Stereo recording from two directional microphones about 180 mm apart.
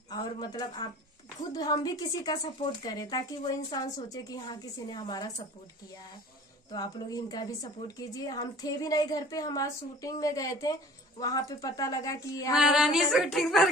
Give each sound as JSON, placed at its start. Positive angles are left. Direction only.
{"t": 0.1, "sound": "a woman's voice", "side_deg": 20}
{"t": 6.7, "sound": "a woman's voice", "side_deg": 20}
{"t": 12.5, "sound": "a sound", "side_deg": -5}